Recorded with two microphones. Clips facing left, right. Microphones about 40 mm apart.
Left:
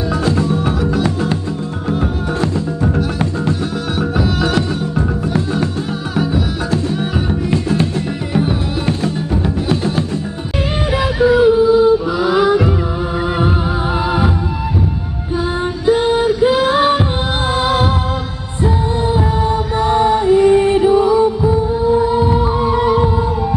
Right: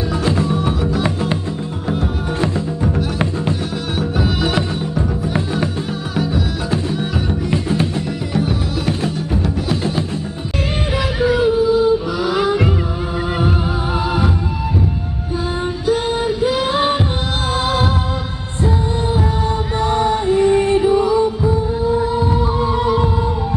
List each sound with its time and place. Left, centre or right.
4.2 s music: centre
7.5 s music: centre
8.3 s music: centre
11.1 s music: centre
15.8 s music: left
16.5 s music: centre
19.8 s music: centre